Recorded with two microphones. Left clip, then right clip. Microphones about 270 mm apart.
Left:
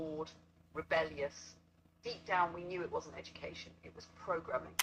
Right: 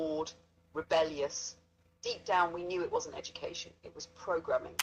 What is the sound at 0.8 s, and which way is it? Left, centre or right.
A woman's voice, right.